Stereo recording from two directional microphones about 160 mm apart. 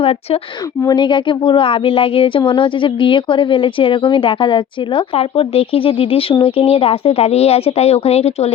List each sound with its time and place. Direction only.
0.0 s speech: 40° left (ahead or behind)
0.8 s speech: 25° left (ahead or behind)